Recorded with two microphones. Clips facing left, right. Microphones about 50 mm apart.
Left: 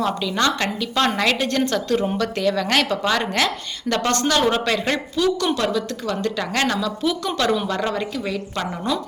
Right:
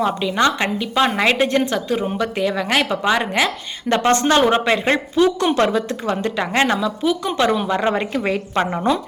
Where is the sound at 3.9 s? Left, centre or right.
Right.